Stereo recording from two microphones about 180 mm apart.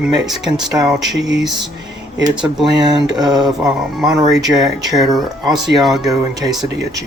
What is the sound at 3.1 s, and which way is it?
Speech, 20° right (ahead or behind).